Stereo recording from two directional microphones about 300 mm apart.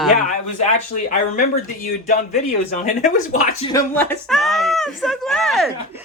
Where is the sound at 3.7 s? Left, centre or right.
Centre.